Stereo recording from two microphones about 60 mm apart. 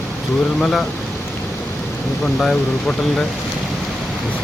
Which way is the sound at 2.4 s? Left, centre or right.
Centre.